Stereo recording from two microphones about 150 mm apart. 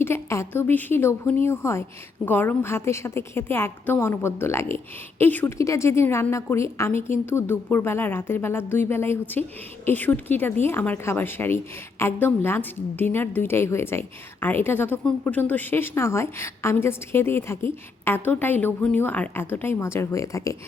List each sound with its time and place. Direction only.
0.0 s a woman's voice: 15° left (ahead or behind)